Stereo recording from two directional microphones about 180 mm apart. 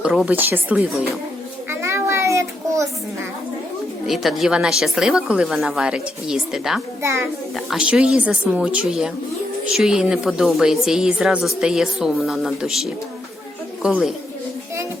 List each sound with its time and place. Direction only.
0.0 s speech: 5° right (ahead or behind)
1.7 s a sound: 15° right (ahead or behind)
4.0 s a woman's voice: centre (ahead or behind)
7.0 s speech: 15° right (ahead or behind)
7.5 s a woman's voice: centre (ahead or behind)